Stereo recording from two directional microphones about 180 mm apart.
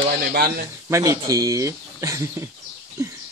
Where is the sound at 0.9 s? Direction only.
15° right (ahead or behind).